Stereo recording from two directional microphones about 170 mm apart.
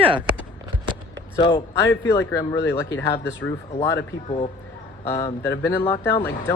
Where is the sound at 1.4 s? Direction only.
25° left (ahead or behind).